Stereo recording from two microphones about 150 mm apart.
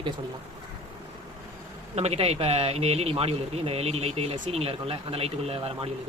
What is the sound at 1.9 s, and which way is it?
A man's voice, 45° right (ahead or behind).